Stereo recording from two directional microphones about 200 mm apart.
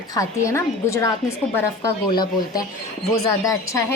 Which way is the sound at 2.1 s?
20° left (ahead or behind).